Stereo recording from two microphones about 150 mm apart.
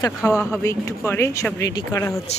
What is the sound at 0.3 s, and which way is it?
Speech, 10° left (ahead or behind).